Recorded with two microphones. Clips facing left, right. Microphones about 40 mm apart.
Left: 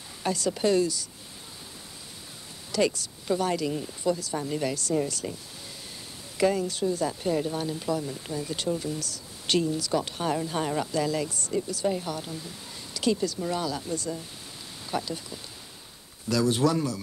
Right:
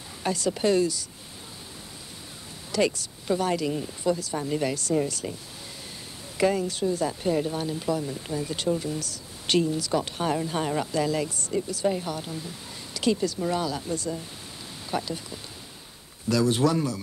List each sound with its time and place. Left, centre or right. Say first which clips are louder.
0.2 s speech: right 1 dB; right
2.7 s speech: right 1 dB; right
6.3 s speech: right 1 dB; right